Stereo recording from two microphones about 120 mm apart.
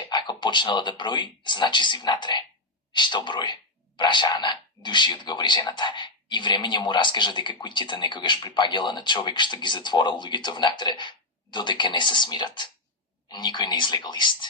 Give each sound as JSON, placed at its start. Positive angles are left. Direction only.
{"t": 0.0, "sound": "speech", "side_deg": 35}